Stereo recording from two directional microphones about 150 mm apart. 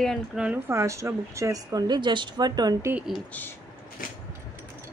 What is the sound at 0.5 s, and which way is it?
Speech, 20° right (ahead or behind).